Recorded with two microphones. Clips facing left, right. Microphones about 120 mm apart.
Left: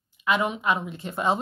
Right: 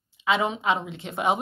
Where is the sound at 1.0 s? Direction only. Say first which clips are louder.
Even; 70° right (ahead or behind).